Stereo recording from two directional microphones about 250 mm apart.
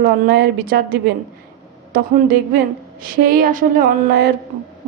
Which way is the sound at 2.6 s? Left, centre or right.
Right.